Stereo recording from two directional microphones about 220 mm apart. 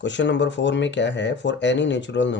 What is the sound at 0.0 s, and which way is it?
Speech, 55° left (ahead or behind).